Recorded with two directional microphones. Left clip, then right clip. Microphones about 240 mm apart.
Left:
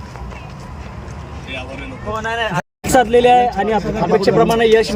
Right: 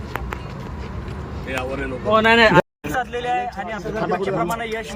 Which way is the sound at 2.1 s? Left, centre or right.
Right.